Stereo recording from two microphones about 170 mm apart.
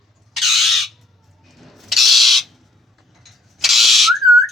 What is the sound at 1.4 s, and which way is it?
Owl, centre (ahead or behind).